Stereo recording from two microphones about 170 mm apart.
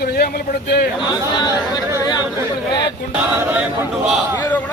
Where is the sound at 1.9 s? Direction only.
25° left (ahead or behind).